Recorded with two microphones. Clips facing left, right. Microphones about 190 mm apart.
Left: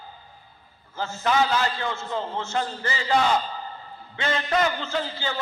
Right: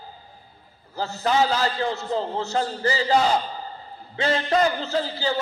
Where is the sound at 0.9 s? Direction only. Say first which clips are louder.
Right 1 dB; 35° right (ahead or behind).